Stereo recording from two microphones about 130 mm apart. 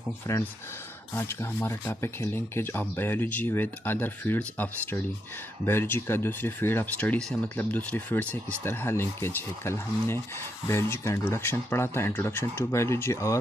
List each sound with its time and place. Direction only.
0.3 s speech: 20° left (ahead or behind)